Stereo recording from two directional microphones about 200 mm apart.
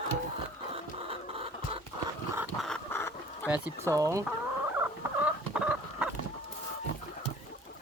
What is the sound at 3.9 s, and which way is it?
Chicken, 15° right (ahead or behind).